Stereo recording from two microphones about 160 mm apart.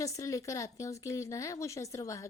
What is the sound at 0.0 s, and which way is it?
A woman's voice, 20° left (ahead or behind).